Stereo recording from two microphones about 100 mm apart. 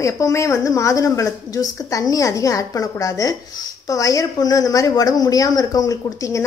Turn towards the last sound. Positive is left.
turn(degrees=35)  # may be behind; listen again after turning